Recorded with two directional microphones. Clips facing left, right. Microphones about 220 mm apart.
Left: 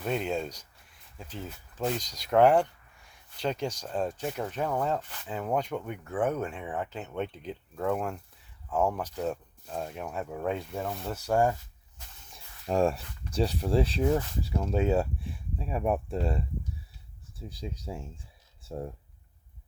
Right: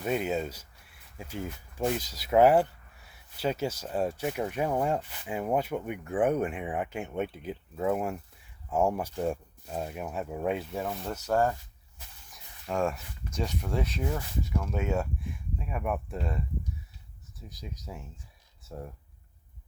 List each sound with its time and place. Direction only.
0.0 s speech: 5° right (ahead or behind)
11.3 s speech: 15° left (ahead or behind)
12.3 s speech: 30° left (ahead or behind)
17.5 s speech: 30° left (ahead or behind)